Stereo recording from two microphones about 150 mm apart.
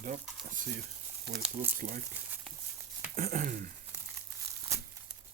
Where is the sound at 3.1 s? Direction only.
65° right (ahead or behind).